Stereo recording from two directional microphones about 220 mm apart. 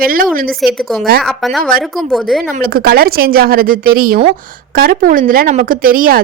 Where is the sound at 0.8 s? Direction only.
Centre (ahead or behind).